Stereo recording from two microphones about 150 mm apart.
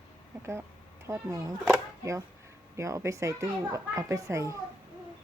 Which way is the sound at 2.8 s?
20° right (ahead or behind).